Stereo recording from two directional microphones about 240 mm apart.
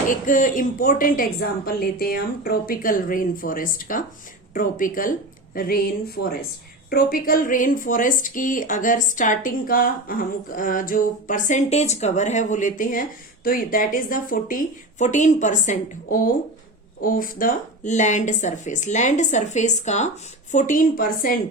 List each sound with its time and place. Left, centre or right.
0.1 s speech: left